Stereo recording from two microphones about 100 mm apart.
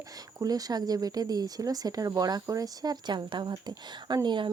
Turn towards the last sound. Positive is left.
turn(degrees=-55)  # may be behind; listen again after turning